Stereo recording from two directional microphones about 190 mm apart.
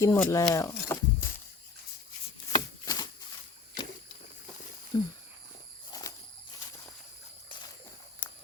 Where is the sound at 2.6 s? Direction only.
20° left (ahead or behind).